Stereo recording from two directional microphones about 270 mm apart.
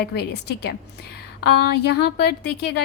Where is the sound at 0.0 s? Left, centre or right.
Left.